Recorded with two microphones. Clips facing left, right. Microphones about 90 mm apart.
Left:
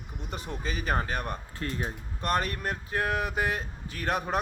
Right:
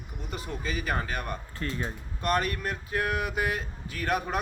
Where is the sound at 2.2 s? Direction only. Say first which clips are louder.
Right 1 dB; 35° left (ahead or behind).